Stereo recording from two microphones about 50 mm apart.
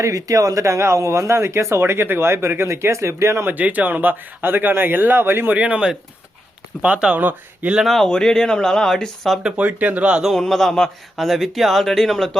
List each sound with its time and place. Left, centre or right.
0.5 s speech: right
3.4 s speech: right
5.5 s speech: right
6.8 s speech: right
7.2 s speech: right
8.0 s speech: centre
9.4 s speech: right
10.2 s speech: centre